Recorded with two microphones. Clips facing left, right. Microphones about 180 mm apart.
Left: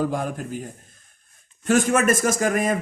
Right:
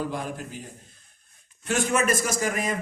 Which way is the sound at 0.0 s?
45° left (ahead or behind).